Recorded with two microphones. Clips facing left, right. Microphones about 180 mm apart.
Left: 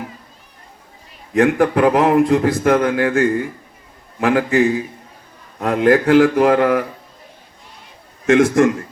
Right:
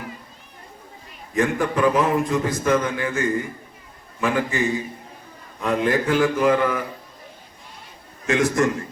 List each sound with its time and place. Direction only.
1.3 s a man's voice: 70° left (ahead or behind)
8.3 s a man's voice: 55° left (ahead or behind)